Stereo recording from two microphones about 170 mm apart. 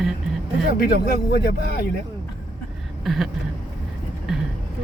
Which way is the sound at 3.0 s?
Centre (ahead or behind).